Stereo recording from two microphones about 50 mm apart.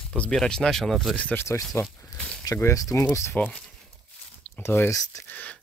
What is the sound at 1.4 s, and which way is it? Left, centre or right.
Speech, left.